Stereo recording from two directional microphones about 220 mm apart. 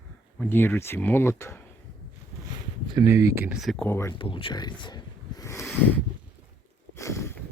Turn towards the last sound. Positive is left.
turn(degrees=10)  # may be behind; listen again after turning